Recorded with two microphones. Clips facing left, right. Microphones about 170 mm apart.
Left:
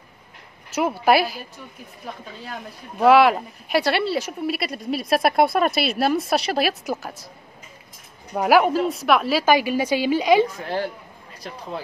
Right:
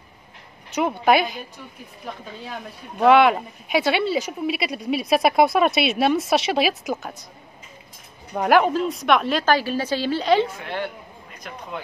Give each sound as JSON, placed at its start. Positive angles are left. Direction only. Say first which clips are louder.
{"t": 0.7, "sound": "speech", "louder": "even", "side_deg": 5}
{"t": 8.4, "sound": "a woman's voice", "louder": "left 1 dB", "side_deg": 5}
{"t": 10.6, "sound": "a woman's voice", "louder": "left 3 dB", "side_deg": 35}